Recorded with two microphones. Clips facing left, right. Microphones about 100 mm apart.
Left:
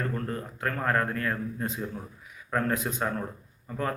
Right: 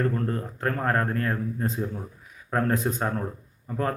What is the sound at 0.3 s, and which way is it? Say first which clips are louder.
A man's voice: right 4 dB; 35° right (ahead or behind).